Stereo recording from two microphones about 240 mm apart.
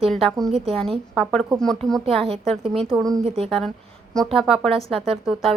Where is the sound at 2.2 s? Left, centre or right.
Right.